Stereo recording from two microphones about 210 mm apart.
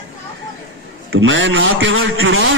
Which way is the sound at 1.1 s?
65° right (ahead or behind).